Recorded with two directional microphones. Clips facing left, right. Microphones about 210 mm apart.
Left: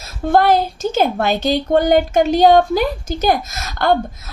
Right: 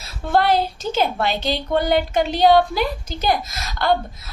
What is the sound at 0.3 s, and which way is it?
A woman's voice, 45° left (ahead or behind).